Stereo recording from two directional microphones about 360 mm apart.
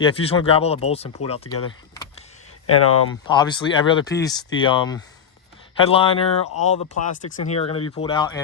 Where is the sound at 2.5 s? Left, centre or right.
Left.